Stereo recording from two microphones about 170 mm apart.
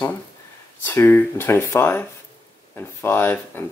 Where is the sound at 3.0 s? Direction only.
10° left (ahead or behind).